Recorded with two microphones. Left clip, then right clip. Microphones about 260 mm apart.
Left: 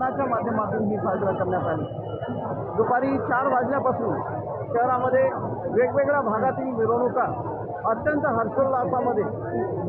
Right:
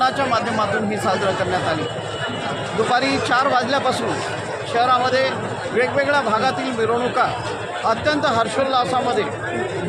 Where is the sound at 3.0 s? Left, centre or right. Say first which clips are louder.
Right 5 dB; right.